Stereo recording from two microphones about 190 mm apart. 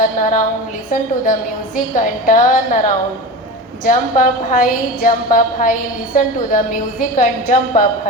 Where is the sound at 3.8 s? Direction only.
45° left (ahead or behind).